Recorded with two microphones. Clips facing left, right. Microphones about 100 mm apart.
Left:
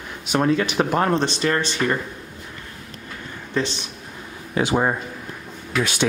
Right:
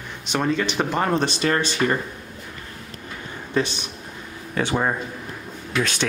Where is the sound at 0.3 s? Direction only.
5° left (ahead or behind).